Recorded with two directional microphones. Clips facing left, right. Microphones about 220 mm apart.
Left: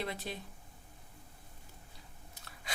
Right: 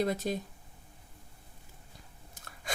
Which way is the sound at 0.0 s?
45° right (ahead or behind).